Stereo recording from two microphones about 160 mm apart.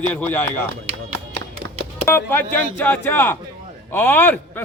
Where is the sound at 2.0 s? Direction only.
15° left (ahead or behind).